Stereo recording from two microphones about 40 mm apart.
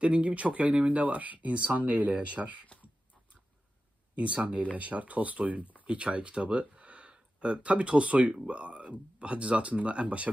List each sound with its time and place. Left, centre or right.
0.0 s speech: right
4.1 s speech: right